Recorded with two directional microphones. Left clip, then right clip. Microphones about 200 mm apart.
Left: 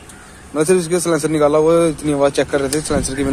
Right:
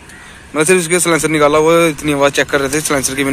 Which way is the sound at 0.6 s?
Centre (ahead or behind).